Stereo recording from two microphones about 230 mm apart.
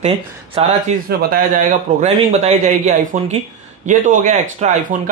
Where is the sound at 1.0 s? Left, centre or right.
Right.